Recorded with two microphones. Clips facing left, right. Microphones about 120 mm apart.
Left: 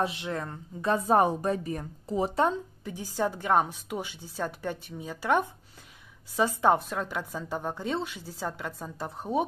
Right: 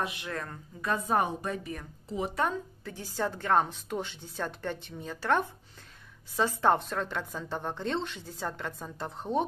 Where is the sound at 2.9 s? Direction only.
15° left (ahead or behind).